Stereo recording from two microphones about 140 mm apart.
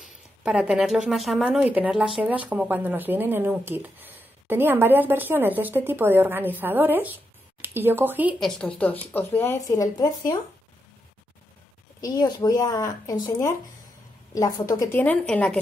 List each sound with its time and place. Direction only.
0.4 s speech: 5° right (ahead or behind)
8.4 s a woman's voice: 5° left (ahead or behind); by 10.3 s 25° left (ahead or behind)
12.0 s a woman's voice: 25° left (ahead or behind); by 15.6 s 10° left (ahead or behind)